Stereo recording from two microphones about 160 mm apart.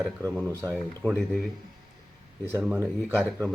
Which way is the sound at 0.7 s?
Centre (ahead or behind).